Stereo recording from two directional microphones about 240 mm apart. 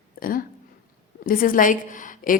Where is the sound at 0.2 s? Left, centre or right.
Left.